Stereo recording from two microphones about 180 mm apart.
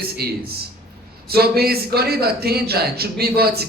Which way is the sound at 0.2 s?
60° right (ahead or behind).